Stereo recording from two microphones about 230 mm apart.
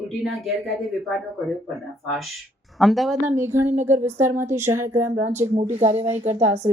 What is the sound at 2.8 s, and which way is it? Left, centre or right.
Speech, centre.